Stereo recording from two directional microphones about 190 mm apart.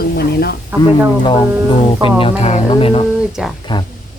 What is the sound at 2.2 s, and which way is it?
Speech, 35° left (ahead or behind).